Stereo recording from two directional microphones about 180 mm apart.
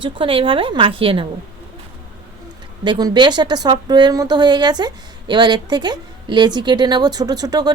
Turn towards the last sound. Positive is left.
turn(degrees=-20)  # may be behind; listen again after turning